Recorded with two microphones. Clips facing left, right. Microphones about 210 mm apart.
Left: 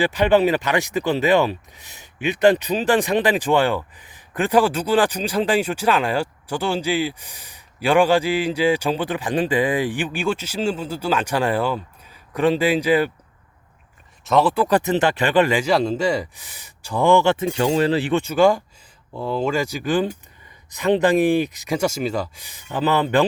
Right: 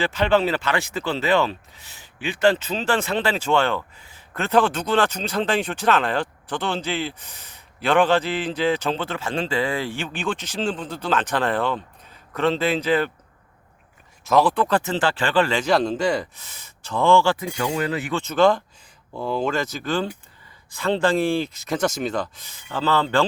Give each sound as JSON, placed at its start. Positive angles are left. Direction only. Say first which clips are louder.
{"t": 0.0, "sound": "speech", "louder": "left 3 dB", "side_deg": 15}
{"t": 14.3, "sound": "speech", "louder": "left 1 dB", "side_deg": 0}
{"t": 18.1, "sound": "speech", "louder": "right 1 dB", "side_deg": 10}